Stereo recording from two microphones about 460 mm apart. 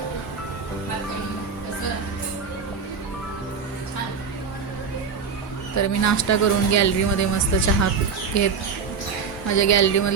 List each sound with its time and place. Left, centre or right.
5.7 s speech: left